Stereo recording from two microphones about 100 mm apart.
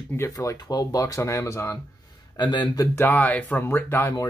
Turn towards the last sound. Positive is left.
turn(degrees=20)  # may be behind; listen again after turning